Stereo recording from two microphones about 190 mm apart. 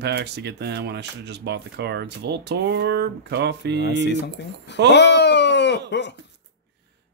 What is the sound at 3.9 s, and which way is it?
A man's voice, 65° left (ahead or behind).